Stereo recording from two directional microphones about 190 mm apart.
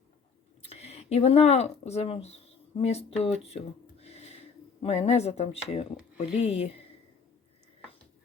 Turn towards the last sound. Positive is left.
turn(degrees=30)  # may be behind; listen again after turning